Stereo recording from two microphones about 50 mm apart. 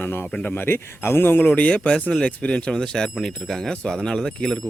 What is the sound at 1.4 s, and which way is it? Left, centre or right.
Speech, left.